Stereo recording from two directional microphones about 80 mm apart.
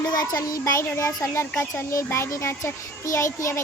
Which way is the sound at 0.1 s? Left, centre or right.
Left.